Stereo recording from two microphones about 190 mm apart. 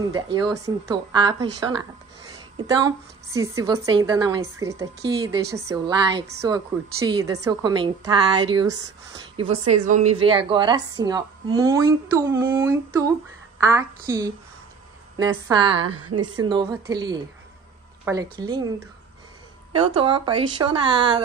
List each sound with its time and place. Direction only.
0.0 s a woman's voice: 20° right (ahead or behind)